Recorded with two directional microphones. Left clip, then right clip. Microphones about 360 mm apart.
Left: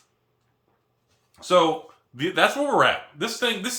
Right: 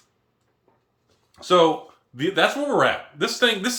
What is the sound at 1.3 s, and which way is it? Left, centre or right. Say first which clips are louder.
Speech: right 2 dB; centre.